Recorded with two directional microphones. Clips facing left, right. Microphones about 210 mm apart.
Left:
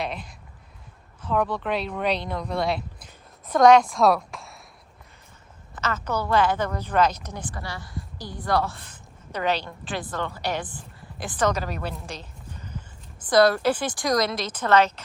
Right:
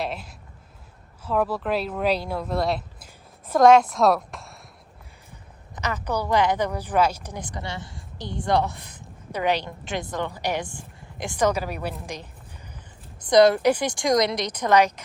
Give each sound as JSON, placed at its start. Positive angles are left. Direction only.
{"t": 0.0, "sound": "a sound", "side_deg": 0}
{"t": 1.2, "sound": "a woman's voice", "side_deg": -5}
{"t": 5.7, "sound": "a woman's voice", "side_deg": -15}